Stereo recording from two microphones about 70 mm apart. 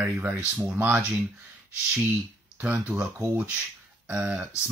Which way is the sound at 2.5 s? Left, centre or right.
Right.